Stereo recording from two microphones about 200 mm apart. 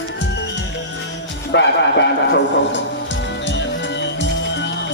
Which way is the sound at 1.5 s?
60° left (ahead or behind).